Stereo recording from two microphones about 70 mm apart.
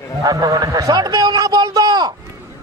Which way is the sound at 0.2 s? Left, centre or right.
Right.